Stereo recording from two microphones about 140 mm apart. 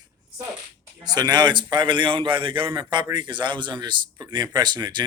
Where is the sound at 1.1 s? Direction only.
30° right (ahead or behind).